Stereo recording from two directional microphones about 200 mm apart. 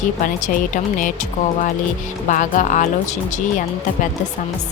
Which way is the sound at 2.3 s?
40° left (ahead or behind).